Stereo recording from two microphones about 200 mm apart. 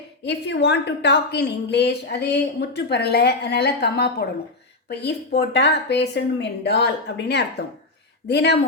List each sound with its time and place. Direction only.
0.3 s a woman's voice: 60° left (ahead or behind)